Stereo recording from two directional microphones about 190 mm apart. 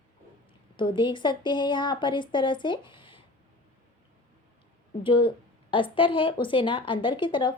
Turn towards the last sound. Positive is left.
turn(degrees=25)  # may be behind; listen again after turning